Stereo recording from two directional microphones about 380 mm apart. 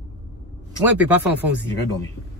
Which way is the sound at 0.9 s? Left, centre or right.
Centre.